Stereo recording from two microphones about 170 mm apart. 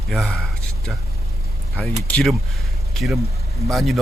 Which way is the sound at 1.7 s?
5° left (ahead or behind).